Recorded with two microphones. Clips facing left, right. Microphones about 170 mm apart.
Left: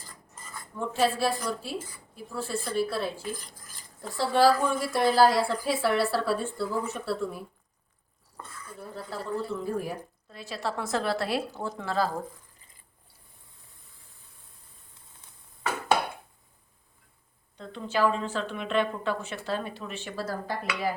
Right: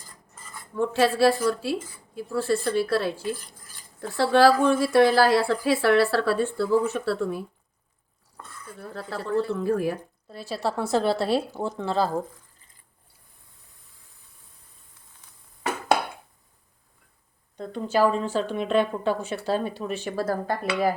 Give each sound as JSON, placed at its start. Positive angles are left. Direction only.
{"t": 0.9, "sound": "a woman's voice", "side_deg": -80}
{"t": 4.2, "sound": "a woman's voice", "side_deg": -75}
{"t": 9.0, "sound": "a woman's voice", "side_deg": -75}
{"t": 10.2, "sound": "a woman's voice", "side_deg": -35}
{"t": 17.6, "sound": "a woman's voice", "side_deg": -45}